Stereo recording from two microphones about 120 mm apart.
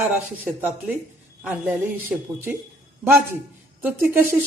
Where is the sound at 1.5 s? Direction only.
15° right (ahead or behind).